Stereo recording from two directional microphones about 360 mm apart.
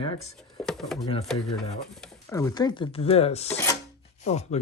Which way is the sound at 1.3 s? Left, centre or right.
Centre.